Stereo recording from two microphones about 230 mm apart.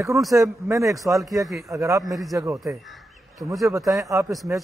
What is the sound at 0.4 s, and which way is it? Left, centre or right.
Speech, centre.